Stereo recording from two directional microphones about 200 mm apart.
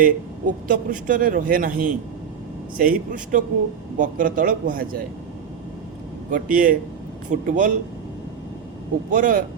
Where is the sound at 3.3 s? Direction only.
45° right (ahead or behind).